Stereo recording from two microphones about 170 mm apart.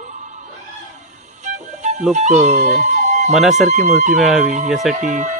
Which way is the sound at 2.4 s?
45° right (ahead or behind).